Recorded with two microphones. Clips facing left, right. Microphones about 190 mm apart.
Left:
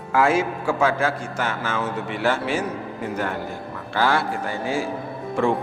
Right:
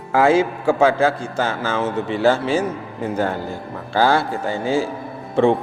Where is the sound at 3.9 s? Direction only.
30° right (ahead or behind).